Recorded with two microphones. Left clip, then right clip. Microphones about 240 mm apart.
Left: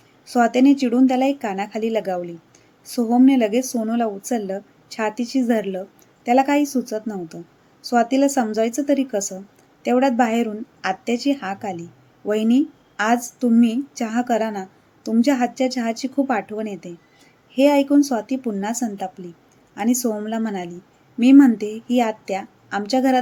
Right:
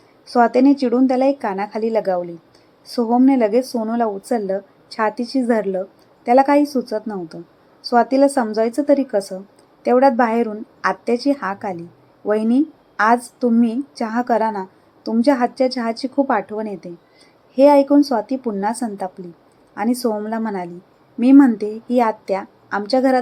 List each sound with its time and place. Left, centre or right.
0.3 s a woman's voice: centre